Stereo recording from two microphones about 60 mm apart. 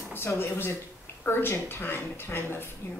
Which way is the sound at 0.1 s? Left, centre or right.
Left.